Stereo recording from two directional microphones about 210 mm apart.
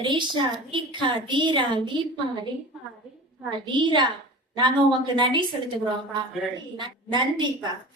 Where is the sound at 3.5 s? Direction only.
20° right (ahead or behind).